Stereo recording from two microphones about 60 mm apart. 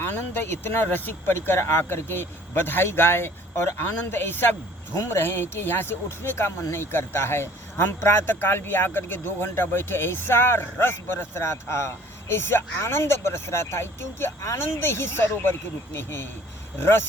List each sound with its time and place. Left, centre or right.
0.0 s speech: left